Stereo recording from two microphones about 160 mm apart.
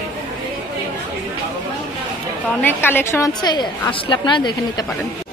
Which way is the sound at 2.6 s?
15° left (ahead or behind).